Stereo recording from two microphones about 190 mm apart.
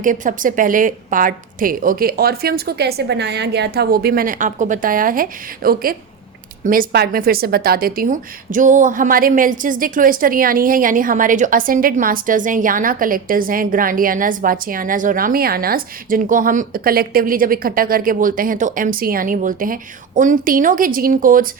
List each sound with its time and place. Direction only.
0.0 s a woman's voice: 45° right (ahead or behind)